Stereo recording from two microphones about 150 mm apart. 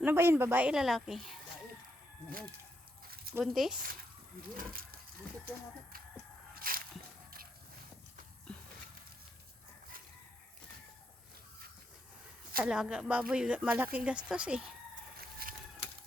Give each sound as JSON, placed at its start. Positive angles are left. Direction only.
{"t": 0.0, "sound": "a woman's voice", "side_deg": -15}
{"t": 3.1, "sound": "zipper", "side_deg": -90}
{"t": 3.4, "sound": "speech", "side_deg": 0}
{"t": 4.5, "sound": "speech", "side_deg": -75}
{"t": 6.5, "sound": "a sound", "side_deg": -75}
{"t": 12.5, "sound": "a woman's voice", "side_deg": -5}
{"t": 15.2, "sound": "chicken", "side_deg": -80}